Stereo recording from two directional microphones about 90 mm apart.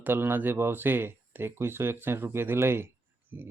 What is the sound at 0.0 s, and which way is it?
Speech, 25° right (ahead or behind).